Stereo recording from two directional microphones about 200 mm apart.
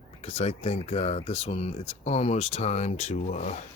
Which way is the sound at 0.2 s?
30° left (ahead or behind).